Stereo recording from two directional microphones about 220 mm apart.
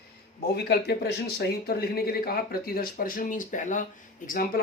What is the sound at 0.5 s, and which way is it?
Speech, 50° left (ahead or behind).